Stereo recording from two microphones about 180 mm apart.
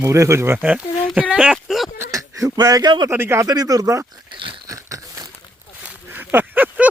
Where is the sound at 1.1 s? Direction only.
5° right (ahead or behind).